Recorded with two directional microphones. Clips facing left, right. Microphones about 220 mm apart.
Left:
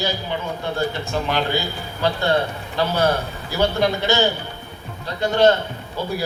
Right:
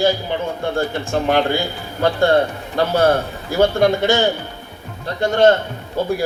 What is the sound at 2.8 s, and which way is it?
Speech, 50° right (ahead or behind).